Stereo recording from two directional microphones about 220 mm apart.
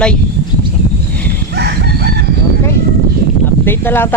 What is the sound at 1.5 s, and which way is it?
Crowing, 50° right (ahead or behind).